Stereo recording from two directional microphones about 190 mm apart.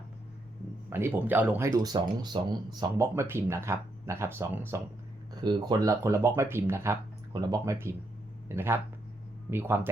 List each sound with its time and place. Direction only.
0.9 s speech: 10° right (ahead or behind)